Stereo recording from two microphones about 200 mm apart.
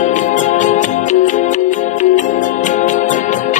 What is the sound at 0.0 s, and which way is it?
Music, 40° left (ahead or behind).